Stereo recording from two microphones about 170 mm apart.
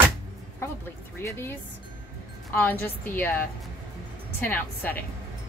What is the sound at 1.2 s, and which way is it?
A woman's voice, 15° left (ahead or behind).